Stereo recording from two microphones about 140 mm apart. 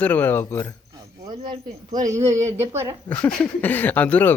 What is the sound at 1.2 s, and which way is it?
A woman's voice, 30° right (ahead or behind).